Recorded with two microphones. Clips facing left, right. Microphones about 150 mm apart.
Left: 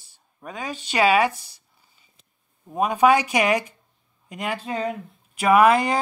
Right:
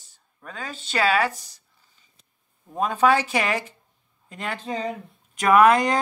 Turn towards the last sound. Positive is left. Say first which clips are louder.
# even
turn(degrees=10)  # may be behind; listen again after turning